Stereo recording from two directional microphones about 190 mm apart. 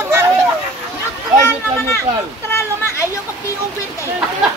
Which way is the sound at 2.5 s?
15° left (ahead or behind).